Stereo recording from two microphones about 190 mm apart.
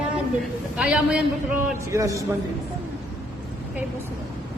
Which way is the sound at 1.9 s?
15° right (ahead or behind).